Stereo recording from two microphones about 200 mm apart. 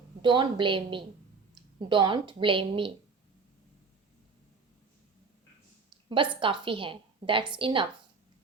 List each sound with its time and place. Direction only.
0.2 s a woman's voice: 25° right (ahead or behind)
6.4 s a woman's voice: 25° right (ahead or behind)